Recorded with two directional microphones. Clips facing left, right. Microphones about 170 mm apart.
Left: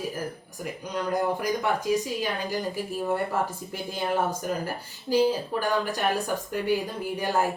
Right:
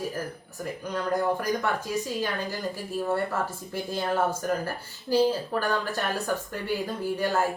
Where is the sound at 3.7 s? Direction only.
15° left (ahead or behind).